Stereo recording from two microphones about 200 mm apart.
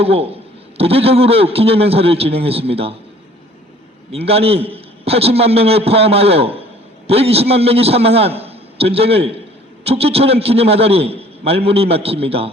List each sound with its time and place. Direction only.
0.0 s a man's voice: 30° right (ahead or behind)
4.1 s a man's voice: 30° right (ahead or behind)